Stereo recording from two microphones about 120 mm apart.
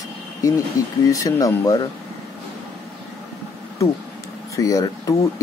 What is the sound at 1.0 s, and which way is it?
Speech, 30° left (ahead or behind).